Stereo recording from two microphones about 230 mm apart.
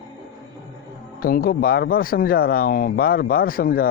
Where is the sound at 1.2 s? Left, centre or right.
Left.